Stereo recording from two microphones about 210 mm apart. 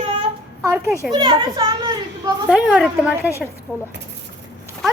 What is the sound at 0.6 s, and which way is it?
A child's voice, 10° right (ahead or behind).